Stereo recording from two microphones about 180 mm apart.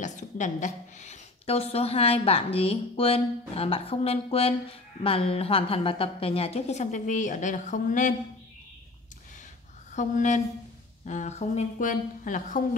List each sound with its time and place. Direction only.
0.0 s a woman's voice: 45° left (ahead or behind)
9.9 s a woman's voice: 40° left (ahead or behind)